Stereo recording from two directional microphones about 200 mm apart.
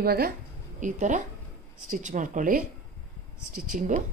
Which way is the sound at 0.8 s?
40° right (ahead or behind).